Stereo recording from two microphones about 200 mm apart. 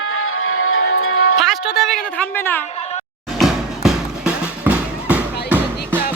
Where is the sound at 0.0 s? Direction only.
90° left.